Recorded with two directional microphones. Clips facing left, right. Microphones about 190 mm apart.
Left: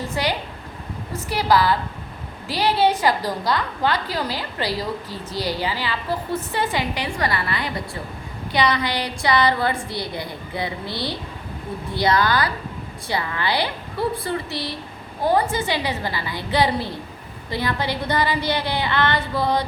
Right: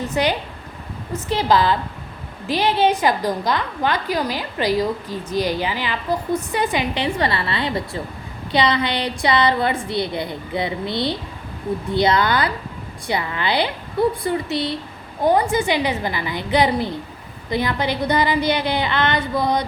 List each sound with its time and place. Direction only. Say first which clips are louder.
0.1 s a woman's voice: right 4 dB; 20° right (ahead or behind)